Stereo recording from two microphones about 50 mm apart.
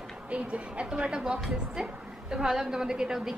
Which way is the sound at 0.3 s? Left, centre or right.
Right.